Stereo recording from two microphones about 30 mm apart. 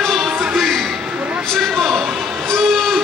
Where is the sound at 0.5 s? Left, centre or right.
Centre.